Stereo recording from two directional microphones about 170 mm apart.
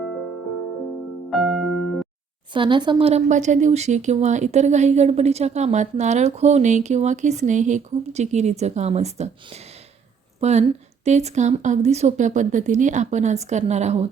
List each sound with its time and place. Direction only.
1.3 s music: centre (ahead or behind)
2.5 s a woman's voice: 30° right (ahead or behind)